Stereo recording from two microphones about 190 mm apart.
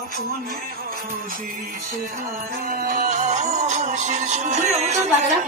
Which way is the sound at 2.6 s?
45° right (ahead or behind).